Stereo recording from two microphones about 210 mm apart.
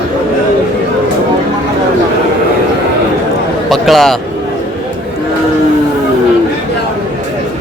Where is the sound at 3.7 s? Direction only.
Centre (ahead or behind).